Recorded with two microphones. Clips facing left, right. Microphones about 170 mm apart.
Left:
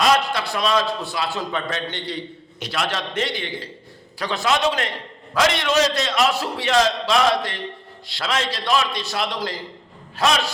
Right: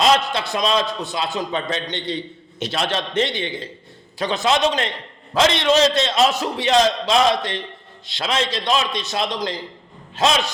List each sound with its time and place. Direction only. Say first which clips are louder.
0.0 s a man's voice: right 1 dB; 20° right (ahead or behind)